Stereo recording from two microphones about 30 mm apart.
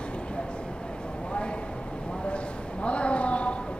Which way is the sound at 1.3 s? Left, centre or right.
Left.